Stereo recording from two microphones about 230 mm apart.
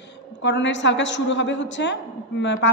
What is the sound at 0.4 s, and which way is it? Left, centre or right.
A woman's voice, left.